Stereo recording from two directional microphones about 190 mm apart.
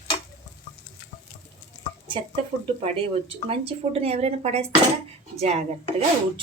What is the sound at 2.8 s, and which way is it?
A woman's voice, 30° right (ahead or behind).